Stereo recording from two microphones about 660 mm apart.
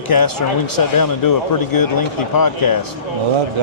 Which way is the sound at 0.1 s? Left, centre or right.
Left.